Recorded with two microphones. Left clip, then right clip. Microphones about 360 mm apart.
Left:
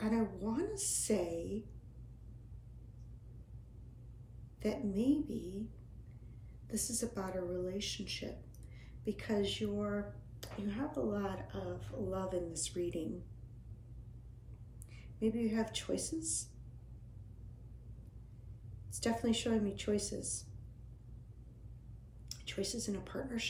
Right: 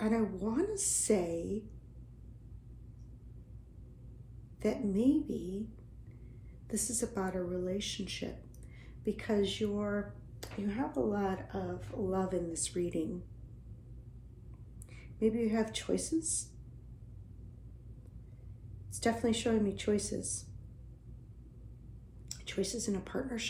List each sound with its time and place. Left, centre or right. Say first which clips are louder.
0.0 s a sound: right 4 dB; centre
4.6 s a woman's voice: right 4 dB; centre
6.7 s a woman's voice: right 3 dB; centre
14.9 s a woman's voice: right 5 dB; centre
19.2 s a woman's voice: right 4 dB; centre
22.3 s a woman's voice: right 4 dB; centre